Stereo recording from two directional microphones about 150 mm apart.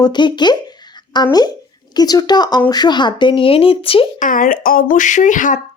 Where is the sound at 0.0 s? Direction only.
30° left (ahead or behind).